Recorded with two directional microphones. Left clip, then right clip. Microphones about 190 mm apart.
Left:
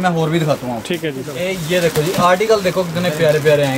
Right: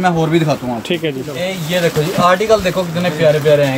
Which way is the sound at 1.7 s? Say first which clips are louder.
Even; 5° left (ahead or behind).